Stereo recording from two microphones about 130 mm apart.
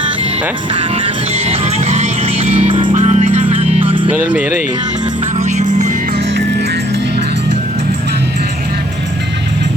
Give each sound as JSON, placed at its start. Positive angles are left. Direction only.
{"t": 0.7, "sound": "music", "side_deg": -45}
{"t": 1.9, "sound": "music", "side_deg": -55}
{"t": 2.9, "sound": "music", "side_deg": -60}
{"t": 3.4, "sound": "music", "side_deg": -50}
{"t": 4.1, "sound": "speech", "side_deg": -10}
{"t": 5.4, "sound": "music", "side_deg": -60}